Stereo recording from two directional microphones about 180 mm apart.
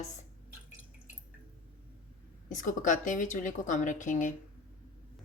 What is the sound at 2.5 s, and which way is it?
A woman's voice, 45° left (ahead or behind).